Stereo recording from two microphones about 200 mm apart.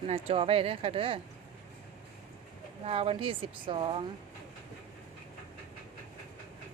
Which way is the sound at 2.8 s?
30° right (ahead or behind).